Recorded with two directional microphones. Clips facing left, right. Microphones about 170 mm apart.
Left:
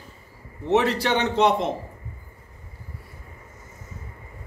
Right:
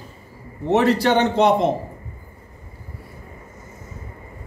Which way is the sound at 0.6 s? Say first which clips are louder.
Right 4 dB; 40° right (ahead or behind).